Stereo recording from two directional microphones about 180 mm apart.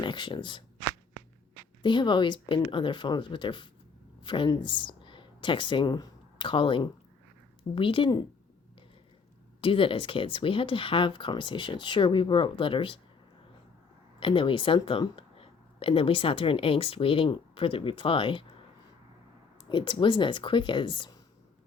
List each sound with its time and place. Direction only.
0.0 s speech: 25° left (ahead or behind)
1.8 s speech: 25° left (ahead or behind)
9.6 s speech: 30° left (ahead or behind)
14.2 s speech: 30° left (ahead or behind)
19.6 s speech: 25° left (ahead or behind)